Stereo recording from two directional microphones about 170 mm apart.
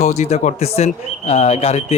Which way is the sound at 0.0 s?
40° left (ahead or behind).